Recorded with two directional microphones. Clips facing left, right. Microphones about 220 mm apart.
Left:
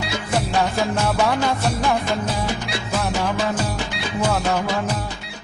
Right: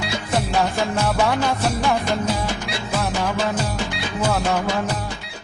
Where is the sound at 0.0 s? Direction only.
Centre (ahead or behind).